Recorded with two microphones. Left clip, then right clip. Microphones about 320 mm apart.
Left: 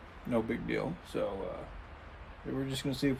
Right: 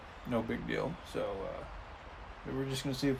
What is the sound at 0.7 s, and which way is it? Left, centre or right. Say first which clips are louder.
Speech: left 1 dB; centre.